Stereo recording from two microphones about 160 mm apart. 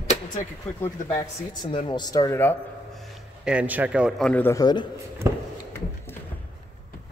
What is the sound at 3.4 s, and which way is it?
Speech, 10° right (ahead or behind).